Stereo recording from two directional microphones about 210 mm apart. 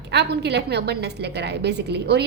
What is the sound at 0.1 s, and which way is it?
A woman's voice, 50° right (ahead or behind).